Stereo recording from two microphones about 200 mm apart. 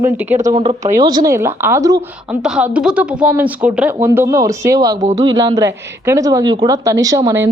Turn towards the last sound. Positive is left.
turn(degrees=-15)  # may be behind; listen again after turning